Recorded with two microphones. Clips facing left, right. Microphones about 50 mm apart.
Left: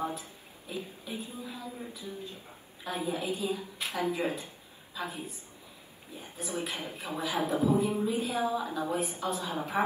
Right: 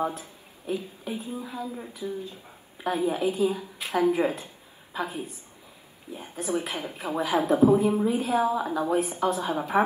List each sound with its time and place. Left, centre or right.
0.0 s a sound: right
1.0 s a woman's voice: right
2.0 s speech: right
2.8 s a woman's voice: right